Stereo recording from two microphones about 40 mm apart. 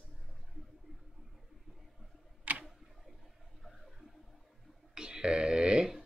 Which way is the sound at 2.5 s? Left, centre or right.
Right.